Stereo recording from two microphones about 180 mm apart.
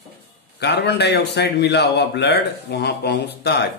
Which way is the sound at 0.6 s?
70° left (ahead or behind).